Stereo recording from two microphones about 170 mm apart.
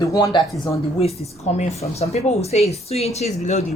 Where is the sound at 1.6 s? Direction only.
40° left (ahead or behind).